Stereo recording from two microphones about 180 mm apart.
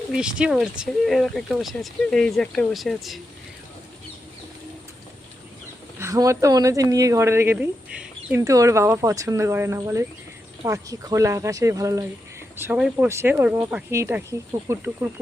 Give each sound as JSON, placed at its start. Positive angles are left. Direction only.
{"t": 0.1, "sound": "speech", "side_deg": -5}
{"t": 6.0, "sound": "a woman's voice", "side_deg": -15}